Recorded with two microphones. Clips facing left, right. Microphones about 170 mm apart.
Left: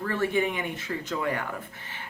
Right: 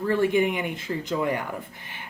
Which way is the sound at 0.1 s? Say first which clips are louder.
Right 5 dB; 15° right (ahead or behind).